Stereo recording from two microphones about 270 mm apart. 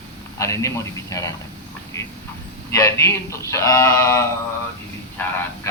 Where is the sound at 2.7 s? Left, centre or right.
Centre.